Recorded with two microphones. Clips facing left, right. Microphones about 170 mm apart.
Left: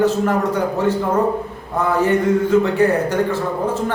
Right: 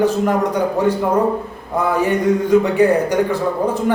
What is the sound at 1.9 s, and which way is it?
A man's voice, 15° right (ahead or behind).